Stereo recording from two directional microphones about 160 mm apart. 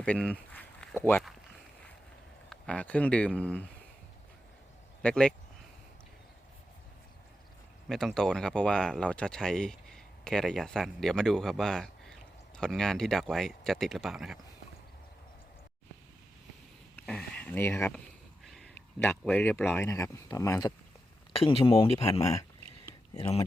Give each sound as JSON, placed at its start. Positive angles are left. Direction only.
{"t": 0.0, "sound": "speech", "side_deg": 5}
{"t": 2.5, "sound": "speech", "side_deg": 5}
{"t": 5.0, "sound": "speech", "side_deg": 5}
{"t": 7.9, "sound": "speech", "side_deg": 5}
{"t": 17.1, "sound": "a sound", "side_deg": 5}
{"t": 18.4, "sound": "speech", "side_deg": 5}
{"t": 21.3, "sound": "speech", "side_deg": 35}
{"t": 22.2, "sound": "speech", "side_deg": 20}